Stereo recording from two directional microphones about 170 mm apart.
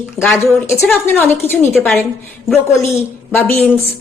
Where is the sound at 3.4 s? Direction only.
Centre (ahead or behind).